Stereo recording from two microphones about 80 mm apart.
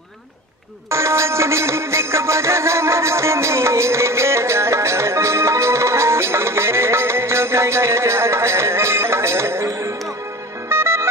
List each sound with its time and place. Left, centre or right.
0.8 s music: right